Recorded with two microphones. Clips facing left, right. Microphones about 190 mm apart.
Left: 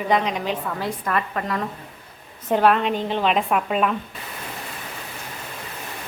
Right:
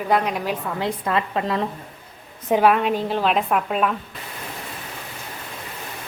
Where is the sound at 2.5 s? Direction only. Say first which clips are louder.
Right 1 dB; 10° right (ahead or behind).